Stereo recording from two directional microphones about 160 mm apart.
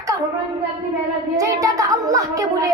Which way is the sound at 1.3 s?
20° right (ahead or behind).